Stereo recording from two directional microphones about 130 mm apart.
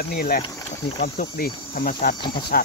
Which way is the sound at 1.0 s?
90° left.